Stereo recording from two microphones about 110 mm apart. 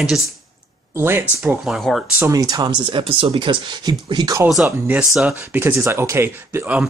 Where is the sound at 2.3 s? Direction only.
40° right (ahead or behind).